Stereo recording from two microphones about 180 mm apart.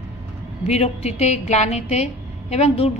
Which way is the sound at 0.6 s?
35° left (ahead or behind).